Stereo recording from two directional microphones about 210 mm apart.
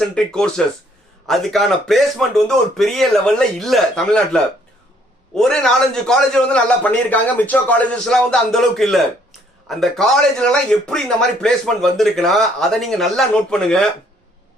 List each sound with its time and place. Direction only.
0.1 s speech: 5° left (ahead or behind)